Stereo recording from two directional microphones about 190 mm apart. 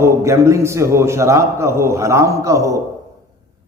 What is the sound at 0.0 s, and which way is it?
A man's voice, 15° right (ahead or behind).